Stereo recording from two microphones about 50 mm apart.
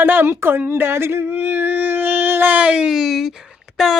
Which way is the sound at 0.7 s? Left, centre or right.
Right.